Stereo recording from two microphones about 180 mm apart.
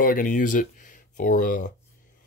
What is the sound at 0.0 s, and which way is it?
Speech, 50° left (ahead or behind).